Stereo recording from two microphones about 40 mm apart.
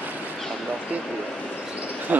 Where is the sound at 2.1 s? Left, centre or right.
Right.